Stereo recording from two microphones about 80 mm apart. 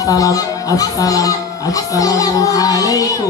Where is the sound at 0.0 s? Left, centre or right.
Left.